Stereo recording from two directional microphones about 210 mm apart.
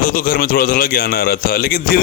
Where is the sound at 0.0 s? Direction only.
45° left (ahead or behind).